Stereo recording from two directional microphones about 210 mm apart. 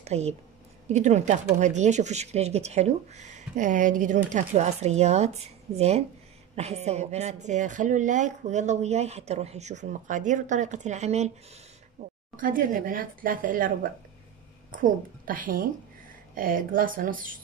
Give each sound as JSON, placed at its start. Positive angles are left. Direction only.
{"t": 0.0, "sound": "speech", "side_deg": -30}
{"t": 12.0, "sound": "a sound", "side_deg": -35}
{"t": 12.4, "sound": "speech", "side_deg": -40}
{"t": 14.7, "sound": "speech", "side_deg": -40}